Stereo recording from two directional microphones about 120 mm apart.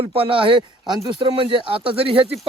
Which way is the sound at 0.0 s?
50° right (ahead or behind).